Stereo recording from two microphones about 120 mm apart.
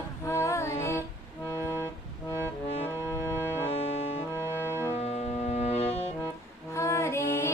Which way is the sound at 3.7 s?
55° left (ahead or behind).